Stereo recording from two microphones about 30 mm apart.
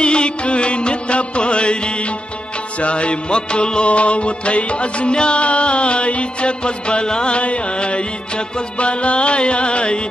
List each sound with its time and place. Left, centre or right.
0.0 s music: left
2.8 s music: left
7.3 s music: left